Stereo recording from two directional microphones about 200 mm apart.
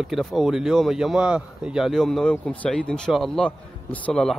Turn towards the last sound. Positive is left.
turn(degrees=0)  # may be behind; listen again after turning